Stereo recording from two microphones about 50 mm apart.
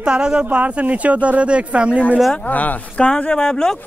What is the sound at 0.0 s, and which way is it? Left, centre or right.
Speech, centre.